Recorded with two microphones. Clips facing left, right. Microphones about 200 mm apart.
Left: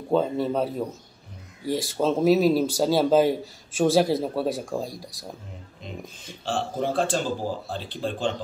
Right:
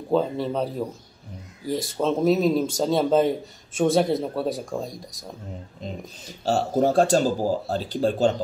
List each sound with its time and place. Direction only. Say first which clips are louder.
0.1 s speech: even; centre (ahead or behind)
6.2 s speech: right 5 dB; 40° right (ahead or behind)